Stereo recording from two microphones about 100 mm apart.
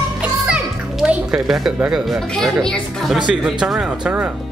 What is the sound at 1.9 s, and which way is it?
Speech, centre (ahead or behind).